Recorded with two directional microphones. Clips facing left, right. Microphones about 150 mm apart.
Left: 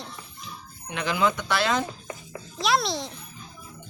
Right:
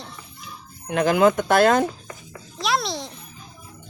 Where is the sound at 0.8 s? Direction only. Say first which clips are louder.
Right 8 dB; 50° right (ahead or behind).